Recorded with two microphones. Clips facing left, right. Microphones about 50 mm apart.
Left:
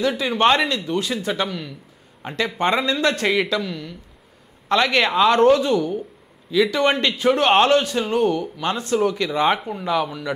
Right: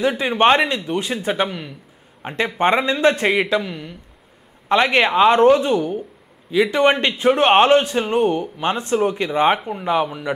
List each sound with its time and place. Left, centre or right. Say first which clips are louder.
0.0 s a man's voice: right 2 dB; right